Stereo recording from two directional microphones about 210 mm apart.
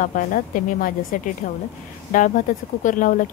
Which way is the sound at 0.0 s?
40° left (ahead or behind).